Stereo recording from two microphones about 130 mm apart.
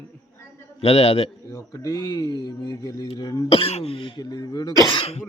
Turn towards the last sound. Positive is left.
turn(degrees=40)  # may be behind; listen again after turning